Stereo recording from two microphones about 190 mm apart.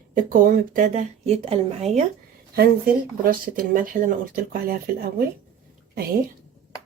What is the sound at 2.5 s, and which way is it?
Speech, 55° right (ahead or behind).